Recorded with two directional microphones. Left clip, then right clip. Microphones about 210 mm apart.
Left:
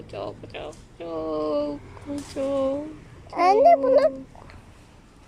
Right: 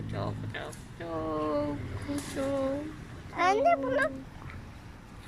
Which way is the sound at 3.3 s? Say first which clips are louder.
Left 9 dB; 20° left (ahead or behind).